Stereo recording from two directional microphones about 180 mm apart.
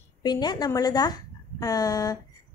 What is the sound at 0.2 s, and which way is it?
A woman's voice, 25° left (ahead or behind).